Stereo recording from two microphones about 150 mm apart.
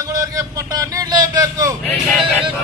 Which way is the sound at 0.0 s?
20° right (ahead or behind).